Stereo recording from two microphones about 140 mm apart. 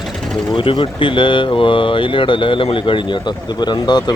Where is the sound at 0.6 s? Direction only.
35° left (ahead or behind).